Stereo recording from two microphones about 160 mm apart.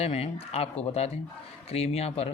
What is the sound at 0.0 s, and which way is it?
Speech, 40° left (ahead or behind).